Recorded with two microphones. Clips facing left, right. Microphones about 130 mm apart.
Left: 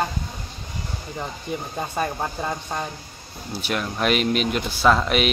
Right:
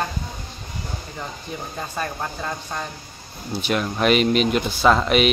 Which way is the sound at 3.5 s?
5° left (ahead or behind).